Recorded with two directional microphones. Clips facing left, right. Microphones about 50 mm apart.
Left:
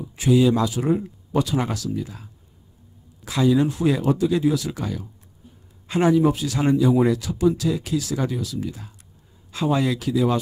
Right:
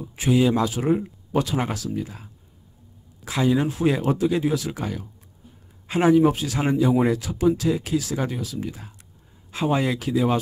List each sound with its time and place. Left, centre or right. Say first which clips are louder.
0.1 s speech: left 2 dB; right